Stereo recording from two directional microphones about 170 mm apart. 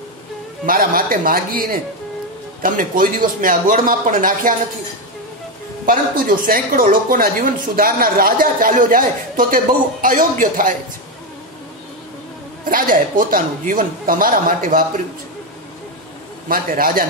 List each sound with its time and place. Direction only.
0.7 s a man's voice: 55° right (ahead or behind)
5.9 s a man's voice: 55° right (ahead or behind)
12.6 s a man's voice: 50° right (ahead or behind)
16.4 s speech: 55° right (ahead or behind)